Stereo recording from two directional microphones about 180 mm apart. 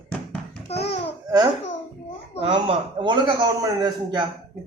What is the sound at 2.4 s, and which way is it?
A man's voice, 30° right (ahead or behind).